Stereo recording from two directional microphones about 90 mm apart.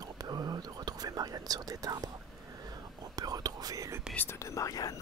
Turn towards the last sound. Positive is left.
turn(degrees=40)  # may be behind; listen again after turning